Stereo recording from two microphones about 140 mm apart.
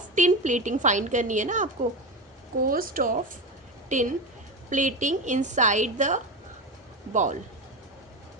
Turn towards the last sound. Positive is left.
turn(degrees=-60)  # may be behind; listen again after turning